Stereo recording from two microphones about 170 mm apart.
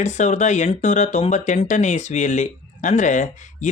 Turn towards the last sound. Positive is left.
turn(degrees=45)  # may be behind; listen again after turning